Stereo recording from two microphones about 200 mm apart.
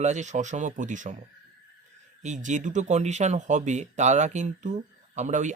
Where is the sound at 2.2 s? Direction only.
35° right (ahead or behind).